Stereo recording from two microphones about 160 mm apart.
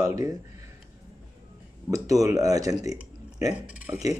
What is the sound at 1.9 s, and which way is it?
Speech, 20° right (ahead or behind).